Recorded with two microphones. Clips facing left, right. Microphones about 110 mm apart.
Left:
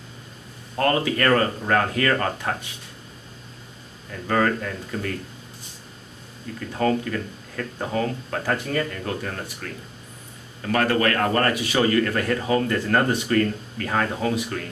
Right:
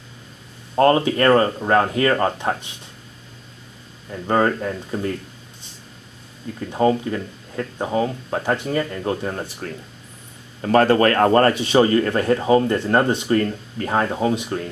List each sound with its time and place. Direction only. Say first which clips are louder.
0.7 s speech: right 6 dB; 25° right (ahead or behind)
4.1 s speech: right 3 dB; 25° right (ahead or behind)
6.7 s speech: right 4 dB; 20° right (ahead or behind)